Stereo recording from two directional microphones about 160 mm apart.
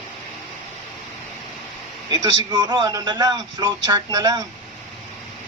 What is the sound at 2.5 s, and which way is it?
Speech, 25° right (ahead or behind).